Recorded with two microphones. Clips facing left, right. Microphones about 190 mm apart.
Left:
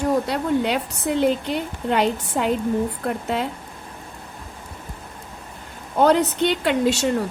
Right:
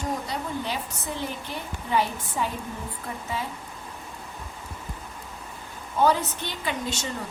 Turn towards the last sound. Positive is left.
turn(degrees=70)  # may be behind; listen again after turning